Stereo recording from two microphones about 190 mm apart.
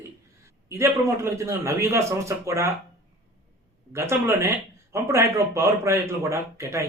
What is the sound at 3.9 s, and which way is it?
Speech, 15° right (ahead or behind).